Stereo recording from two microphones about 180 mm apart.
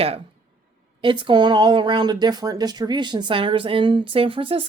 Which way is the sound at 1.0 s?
25° right (ahead or behind).